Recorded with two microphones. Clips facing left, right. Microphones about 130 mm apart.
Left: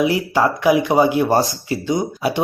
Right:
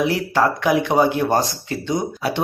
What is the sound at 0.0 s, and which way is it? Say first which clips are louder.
Speech: left 2 dB; 5° left (ahead or behind).